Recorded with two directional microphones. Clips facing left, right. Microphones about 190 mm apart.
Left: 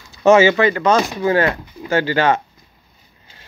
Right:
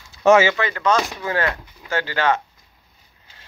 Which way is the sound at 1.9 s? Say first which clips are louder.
Left 5 dB; 10° left (ahead or behind).